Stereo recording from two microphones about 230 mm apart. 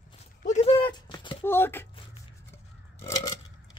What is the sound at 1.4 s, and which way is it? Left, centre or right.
Speech, centre.